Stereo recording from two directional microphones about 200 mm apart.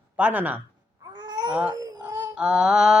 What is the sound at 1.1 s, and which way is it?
Babbling, 20° right (ahead or behind).